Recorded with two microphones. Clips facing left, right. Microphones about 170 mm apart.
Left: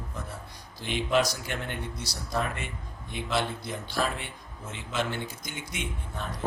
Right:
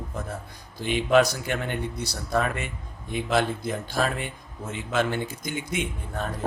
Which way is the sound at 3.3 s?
50° right (ahead or behind).